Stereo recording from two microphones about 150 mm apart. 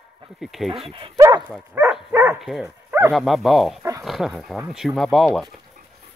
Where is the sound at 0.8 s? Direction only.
35° right (ahead or behind).